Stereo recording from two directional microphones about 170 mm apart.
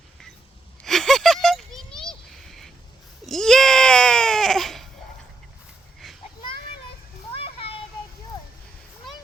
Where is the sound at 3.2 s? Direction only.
5° left (ahead or behind).